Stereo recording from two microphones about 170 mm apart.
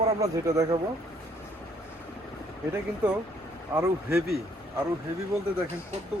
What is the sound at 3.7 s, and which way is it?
Speech, 20° right (ahead or behind).